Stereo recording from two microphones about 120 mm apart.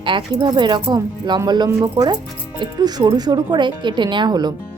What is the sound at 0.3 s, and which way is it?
A woman's voice, 35° right (ahead or behind).